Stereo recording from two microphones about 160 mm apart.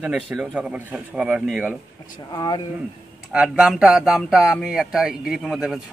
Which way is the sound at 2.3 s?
25° left (ahead or behind).